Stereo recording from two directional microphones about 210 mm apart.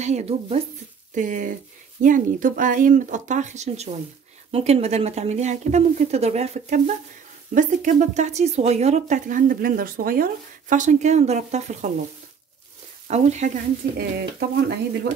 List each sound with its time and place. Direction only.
0.0 s a woman's voice: 30° right (ahead or behind)
13.1 s a woman's voice: 35° right (ahead or behind)
13.9 s speech: 50° right (ahead or behind)